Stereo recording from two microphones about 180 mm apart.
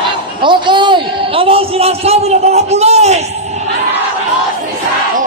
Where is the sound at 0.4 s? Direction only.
25° right (ahead or behind).